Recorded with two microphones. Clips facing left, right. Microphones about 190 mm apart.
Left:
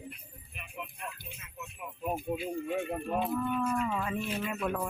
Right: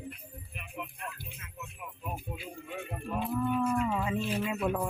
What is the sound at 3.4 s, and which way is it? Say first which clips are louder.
Speech: right 2 dB; 10° right (ahead or behind).